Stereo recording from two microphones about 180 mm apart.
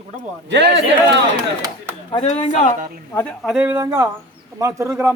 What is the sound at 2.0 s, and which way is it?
Speech, 30° left (ahead or behind).